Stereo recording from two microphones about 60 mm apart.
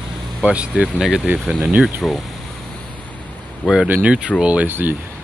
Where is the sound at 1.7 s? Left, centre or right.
Right.